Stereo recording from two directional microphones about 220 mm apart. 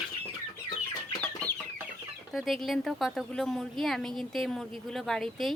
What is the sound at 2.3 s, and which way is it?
Speech, centre (ahead or behind).